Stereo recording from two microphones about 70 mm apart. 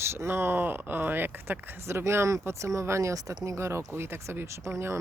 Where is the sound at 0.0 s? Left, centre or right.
Right.